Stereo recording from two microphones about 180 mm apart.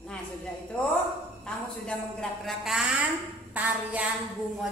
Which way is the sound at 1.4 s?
5° left (ahead or behind).